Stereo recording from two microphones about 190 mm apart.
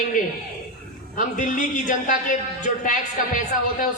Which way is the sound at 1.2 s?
45° left (ahead or behind).